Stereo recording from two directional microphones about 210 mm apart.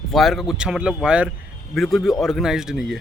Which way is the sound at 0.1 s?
Centre (ahead or behind).